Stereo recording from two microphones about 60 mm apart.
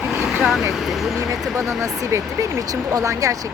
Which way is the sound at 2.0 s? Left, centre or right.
Right.